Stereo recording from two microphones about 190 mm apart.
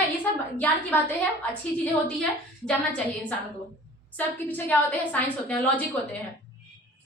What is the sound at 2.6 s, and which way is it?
A woman's voice, 5° left (ahead or behind).